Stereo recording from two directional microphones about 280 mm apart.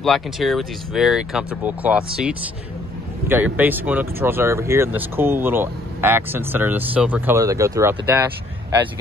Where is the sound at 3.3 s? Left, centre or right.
Centre.